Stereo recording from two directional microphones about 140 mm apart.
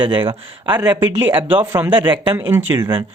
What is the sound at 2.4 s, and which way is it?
Speech, 15° right (ahead or behind).